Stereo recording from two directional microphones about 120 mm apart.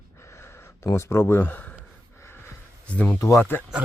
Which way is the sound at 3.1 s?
25° left (ahead or behind).